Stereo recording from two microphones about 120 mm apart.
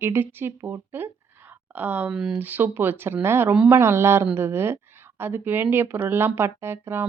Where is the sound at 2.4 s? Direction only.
15° right (ahead or behind).